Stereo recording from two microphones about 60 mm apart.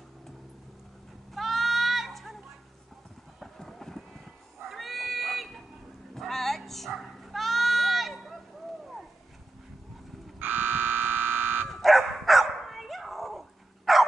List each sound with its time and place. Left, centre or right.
1.3 s goat: centre
3.3 s a sound: centre
4.6 s pig: centre
6.1 s music: centre
10.4 s alarm: right
11.7 s dog: centre